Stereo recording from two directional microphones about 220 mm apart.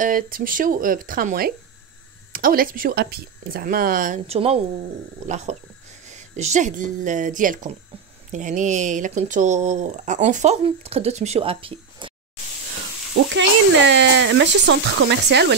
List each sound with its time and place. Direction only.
0.0 s speech: 40° right (ahead or behind); by 12.1 s 25° right (ahead or behind)
13.8 s speech: 55° right (ahead or behind)